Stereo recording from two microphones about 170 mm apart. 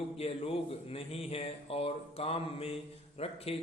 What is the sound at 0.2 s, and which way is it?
Speech, 35° left (ahead or behind).